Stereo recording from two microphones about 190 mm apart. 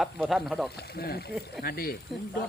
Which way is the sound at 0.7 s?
55° left (ahead or behind).